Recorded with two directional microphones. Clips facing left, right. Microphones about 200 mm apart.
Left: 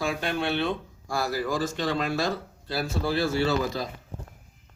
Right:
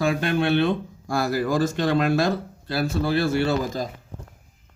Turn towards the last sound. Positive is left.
turn(degrees=-50)  # may be behind; listen again after turning